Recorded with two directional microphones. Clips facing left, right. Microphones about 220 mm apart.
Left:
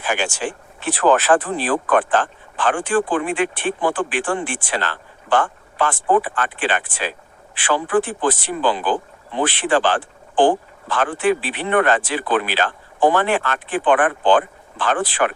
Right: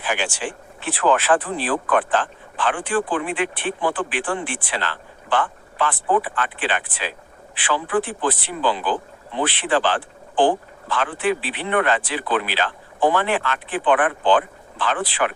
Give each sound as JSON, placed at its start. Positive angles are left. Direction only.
{"t": 0.0, "sound": "speech", "side_deg": 45}